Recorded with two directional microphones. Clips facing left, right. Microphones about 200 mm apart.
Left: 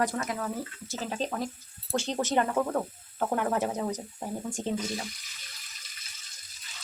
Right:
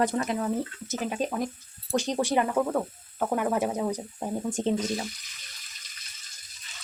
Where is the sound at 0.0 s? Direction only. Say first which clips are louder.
Right 4 dB; 25° right (ahead or behind).